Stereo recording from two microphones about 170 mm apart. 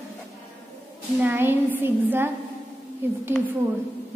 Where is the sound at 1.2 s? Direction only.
10° right (ahead or behind).